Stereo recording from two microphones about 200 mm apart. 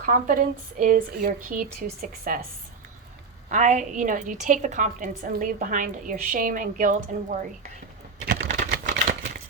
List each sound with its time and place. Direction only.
0.0 s speech: 45° right (ahead or behind)
3.5 s a woman's voice: 35° right (ahead or behind)
8.3 s typewriter: 60° right (ahead or behind)